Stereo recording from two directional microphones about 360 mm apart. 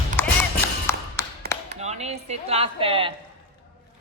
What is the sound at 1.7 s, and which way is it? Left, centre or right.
Speech, centre.